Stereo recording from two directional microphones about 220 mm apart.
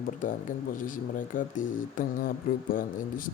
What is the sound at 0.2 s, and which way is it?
Speech, 40° left (ahead or behind).